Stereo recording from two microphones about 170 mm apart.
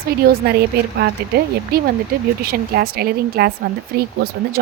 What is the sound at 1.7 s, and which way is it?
Speech, 65° right (ahead or behind).